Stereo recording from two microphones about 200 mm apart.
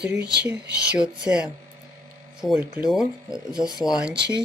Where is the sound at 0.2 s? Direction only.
55° right (ahead or behind).